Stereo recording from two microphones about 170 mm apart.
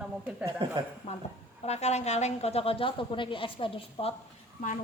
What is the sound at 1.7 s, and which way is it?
A woman's voice, 40° left (ahead or behind).